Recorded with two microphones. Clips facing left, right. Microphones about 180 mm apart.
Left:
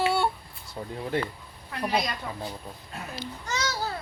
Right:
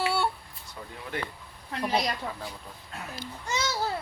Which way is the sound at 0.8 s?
35° left (ahead or behind).